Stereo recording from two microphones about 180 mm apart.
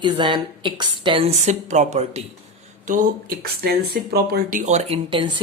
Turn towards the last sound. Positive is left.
turn(degrees=-25)  # may be behind; listen again after turning